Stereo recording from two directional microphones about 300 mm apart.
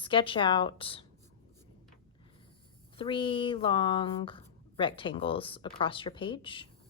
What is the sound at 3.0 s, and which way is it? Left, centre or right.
Speech, centre.